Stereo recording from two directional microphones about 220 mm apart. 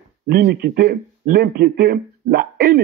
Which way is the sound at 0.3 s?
45° right (ahead or behind).